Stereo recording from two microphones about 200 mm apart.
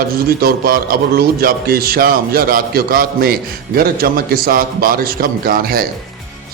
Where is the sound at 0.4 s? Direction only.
50° right (ahead or behind).